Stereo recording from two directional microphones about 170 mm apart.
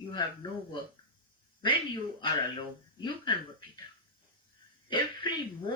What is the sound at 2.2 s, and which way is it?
Speech, 25° left (ahead or behind).